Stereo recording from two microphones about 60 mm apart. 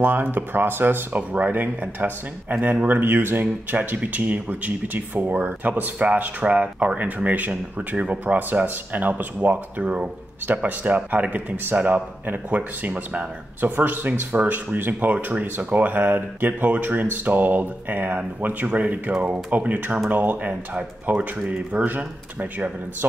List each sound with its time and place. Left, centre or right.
0.0 s speech: right